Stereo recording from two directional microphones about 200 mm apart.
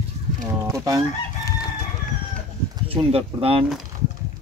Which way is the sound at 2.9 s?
30° right (ahead or behind).